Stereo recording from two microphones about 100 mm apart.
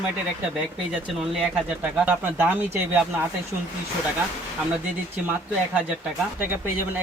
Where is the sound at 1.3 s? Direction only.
5° right (ahead or behind).